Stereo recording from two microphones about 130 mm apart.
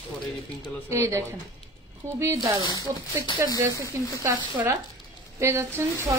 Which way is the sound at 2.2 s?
25° right (ahead or behind).